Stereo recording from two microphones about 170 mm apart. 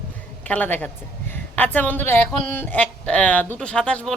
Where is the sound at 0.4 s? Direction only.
10° left (ahead or behind).